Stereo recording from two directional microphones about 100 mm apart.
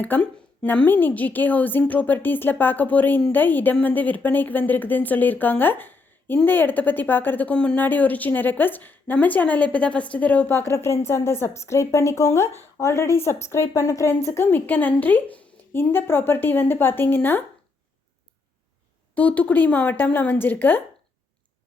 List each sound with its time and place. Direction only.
0.0 s a woman's voice: 15° left (ahead or behind)
19.1 s a woman's voice: 15° left (ahead or behind)